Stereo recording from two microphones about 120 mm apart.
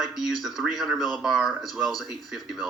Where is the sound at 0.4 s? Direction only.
Centre (ahead or behind).